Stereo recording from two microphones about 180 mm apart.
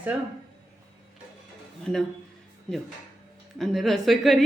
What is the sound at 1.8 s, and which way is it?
Speech, centre (ahead or behind).